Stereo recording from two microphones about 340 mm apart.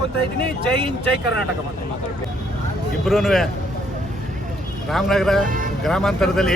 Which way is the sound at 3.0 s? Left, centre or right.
Centre.